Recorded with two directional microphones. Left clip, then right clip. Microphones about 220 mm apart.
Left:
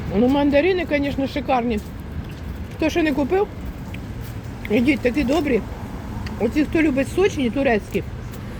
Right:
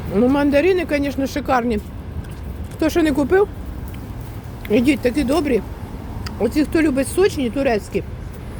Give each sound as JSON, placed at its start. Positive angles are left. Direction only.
{"t": 0.1, "sound": "speech", "side_deg": -15}
{"t": 2.8, "sound": "speech", "side_deg": -20}
{"t": 4.7, "sound": "speech", "side_deg": -20}